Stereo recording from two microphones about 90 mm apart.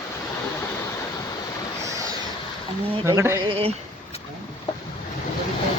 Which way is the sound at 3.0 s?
30° right (ahead or behind).